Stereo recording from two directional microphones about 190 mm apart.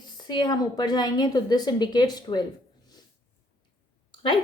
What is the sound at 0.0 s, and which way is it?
A woman's voice, 20° left (ahead or behind).